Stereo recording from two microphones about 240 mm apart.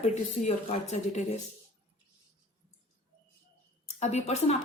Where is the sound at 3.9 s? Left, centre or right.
Left.